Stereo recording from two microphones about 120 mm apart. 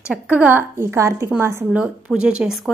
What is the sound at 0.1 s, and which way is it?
A woman's voice, 15° right (ahead or behind).